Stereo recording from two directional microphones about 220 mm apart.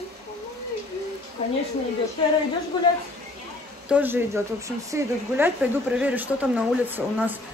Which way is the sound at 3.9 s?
10° right (ahead or behind).